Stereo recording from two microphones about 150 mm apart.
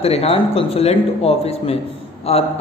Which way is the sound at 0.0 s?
45° left (ahead or behind).